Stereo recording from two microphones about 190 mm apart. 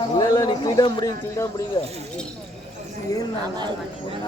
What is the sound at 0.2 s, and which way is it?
A man's voice, 20° left (ahead or behind).